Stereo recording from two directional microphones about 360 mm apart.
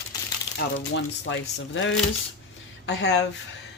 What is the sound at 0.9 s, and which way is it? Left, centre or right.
A woman's voice, left.